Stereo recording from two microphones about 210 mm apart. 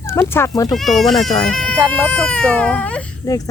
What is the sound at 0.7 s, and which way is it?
Speech, centre (ahead or behind).